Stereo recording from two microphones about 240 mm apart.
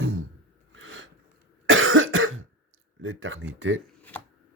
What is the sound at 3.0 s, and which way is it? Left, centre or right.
Speech, right.